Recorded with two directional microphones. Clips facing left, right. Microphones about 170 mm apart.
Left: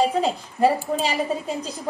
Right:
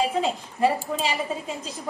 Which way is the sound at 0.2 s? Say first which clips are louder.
Left 3 dB; 40° left (ahead or behind).